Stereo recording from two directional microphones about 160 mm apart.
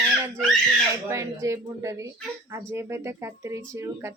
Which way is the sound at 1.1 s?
20° right (ahead or behind).